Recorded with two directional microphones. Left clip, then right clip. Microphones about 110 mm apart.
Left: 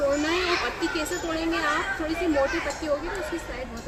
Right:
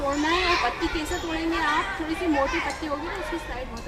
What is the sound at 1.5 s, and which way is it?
Speech, 15° right (ahead or behind).